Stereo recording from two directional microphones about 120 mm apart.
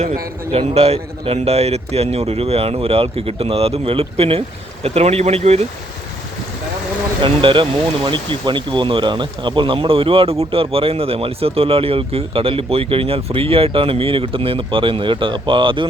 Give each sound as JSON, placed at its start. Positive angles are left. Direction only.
{"t": 0.5, "sound": "a man's voice", "side_deg": -55}
{"t": 7.2, "sound": "speech", "side_deg": -45}